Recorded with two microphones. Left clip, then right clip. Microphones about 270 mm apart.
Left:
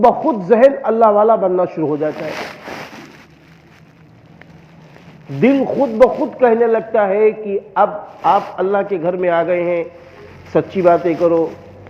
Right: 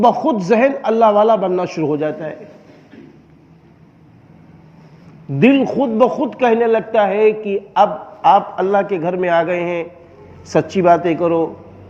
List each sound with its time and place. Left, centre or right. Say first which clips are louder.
0.0 s a man's voice: left 1 dB; right
5.4 s a man's voice: even; right